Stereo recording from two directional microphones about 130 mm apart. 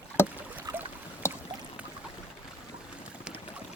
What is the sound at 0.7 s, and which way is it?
Boat, 30° right (ahead or behind).